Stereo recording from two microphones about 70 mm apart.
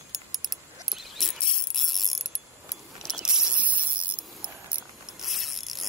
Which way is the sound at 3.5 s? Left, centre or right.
Right.